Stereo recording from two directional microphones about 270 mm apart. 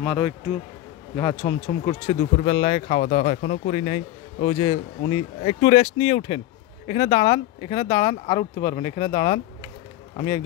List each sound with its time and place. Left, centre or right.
1.1 s speech: left